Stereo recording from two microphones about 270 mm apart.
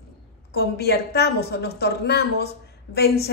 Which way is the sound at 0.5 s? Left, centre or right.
Left.